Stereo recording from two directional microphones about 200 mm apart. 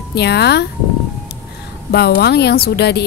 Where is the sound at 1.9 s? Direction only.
55° left (ahead or behind).